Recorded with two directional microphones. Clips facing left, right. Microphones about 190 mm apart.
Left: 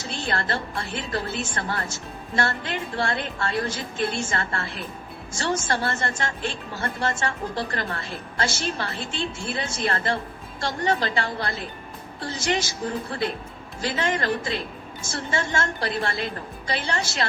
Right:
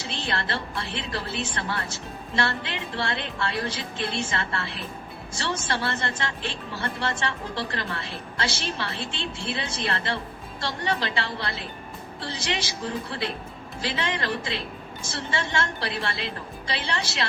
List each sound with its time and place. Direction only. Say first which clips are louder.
0.0 s speech: left 2 dB; 45° left (ahead or behind)